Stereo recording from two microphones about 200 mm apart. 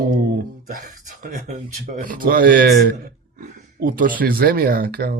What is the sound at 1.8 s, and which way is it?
Speech, 40° right (ahead or behind).